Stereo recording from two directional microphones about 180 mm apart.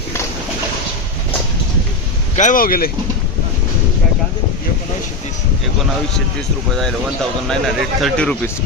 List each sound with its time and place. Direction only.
2.3 s speech: 45° left (ahead or behind)
7.4 s speech: centre (ahead or behind)